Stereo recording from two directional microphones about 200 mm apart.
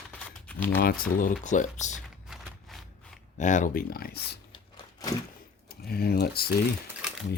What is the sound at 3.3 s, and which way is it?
Speech, 40° left (ahead or behind).